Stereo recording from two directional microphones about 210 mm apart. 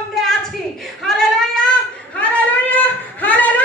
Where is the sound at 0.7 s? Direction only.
Centre (ahead or behind).